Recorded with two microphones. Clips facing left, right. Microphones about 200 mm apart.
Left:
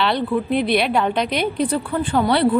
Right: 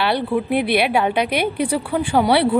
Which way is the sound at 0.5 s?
60° right (ahead or behind).